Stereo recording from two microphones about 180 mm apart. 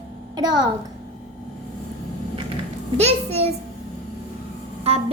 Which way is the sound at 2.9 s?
35° right (ahead or behind).